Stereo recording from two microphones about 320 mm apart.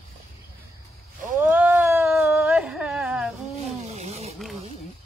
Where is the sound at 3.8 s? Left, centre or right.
Right.